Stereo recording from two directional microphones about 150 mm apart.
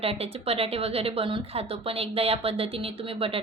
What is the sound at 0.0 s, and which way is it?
A woman's voice, 40° right (ahead or behind).